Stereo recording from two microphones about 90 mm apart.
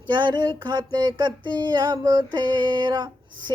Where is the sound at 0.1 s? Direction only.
60° right (ahead or behind).